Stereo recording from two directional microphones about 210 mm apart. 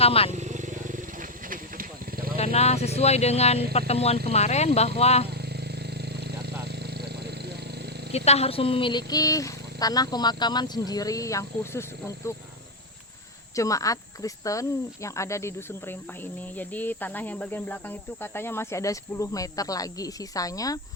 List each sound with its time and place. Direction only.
0.0 s speech: 30° left (ahead or behind)
0.3 s vehicle: 35° right (ahead or behind)
1.5 s a sound: 45° right (ahead or behind)
2.4 s speech: 30° left (ahead or behind)
6.1 s vehicle: 50° right (ahead or behind)
8.1 s speech: 30° left (ahead or behind); by 12.3 s 15° left (ahead or behind)
13.6 s speech: 15° left (ahead or behind)